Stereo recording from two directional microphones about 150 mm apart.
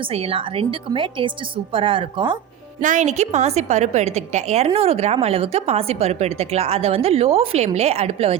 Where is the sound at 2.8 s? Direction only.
55° right (ahead or behind).